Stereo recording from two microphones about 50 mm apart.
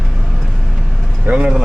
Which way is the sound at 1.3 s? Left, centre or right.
Right.